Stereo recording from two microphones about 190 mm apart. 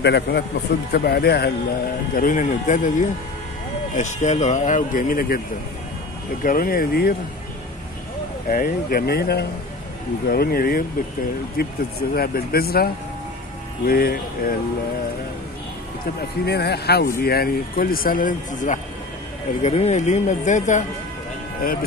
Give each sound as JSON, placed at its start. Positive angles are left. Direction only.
{"t": 0.0, "sound": "speech", "side_deg": 60}
{"t": 2.1, "sound": "a man's voice", "side_deg": 45}
{"t": 6.4, "sound": "speech", "side_deg": 50}
{"t": 8.5, "sound": "speech", "side_deg": 50}
{"t": 16.2, "sound": "a man's voice", "side_deg": 60}